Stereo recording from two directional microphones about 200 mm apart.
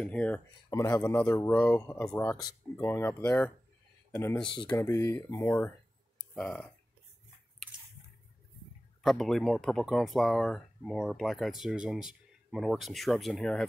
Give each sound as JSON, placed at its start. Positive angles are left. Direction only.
{"t": 0.0, "sound": "speech", "side_deg": 5}
{"t": 4.4, "sound": "speech", "side_deg": 25}
{"t": 9.0, "sound": "speech", "side_deg": 0}